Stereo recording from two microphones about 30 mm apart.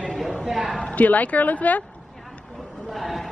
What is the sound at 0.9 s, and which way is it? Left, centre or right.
Speech, left.